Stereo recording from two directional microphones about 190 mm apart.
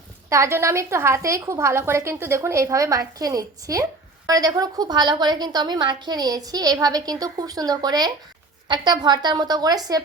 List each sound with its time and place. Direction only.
0.3 s a woman's voice: 15° right (ahead or behind)